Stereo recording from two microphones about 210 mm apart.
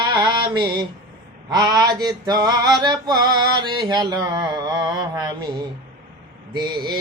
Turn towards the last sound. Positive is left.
turn(degrees=-20)  # may be behind; listen again after turning